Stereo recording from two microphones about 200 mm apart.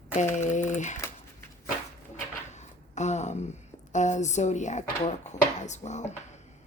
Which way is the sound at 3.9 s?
35° left (ahead or behind).